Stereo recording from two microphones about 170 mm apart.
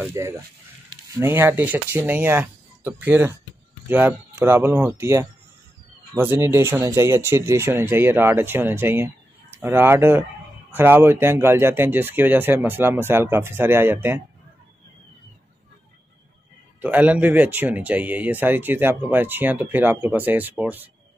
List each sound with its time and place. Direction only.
0.1 s speech: 15° right (ahead or behind)
16.8 s speech: 10° right (ahead or behind)